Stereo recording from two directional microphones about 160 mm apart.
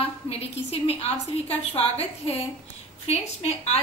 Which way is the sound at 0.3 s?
40° left (ahead or behind).